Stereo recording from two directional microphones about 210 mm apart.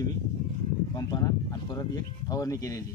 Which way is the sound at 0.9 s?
20° left (ahead or behind).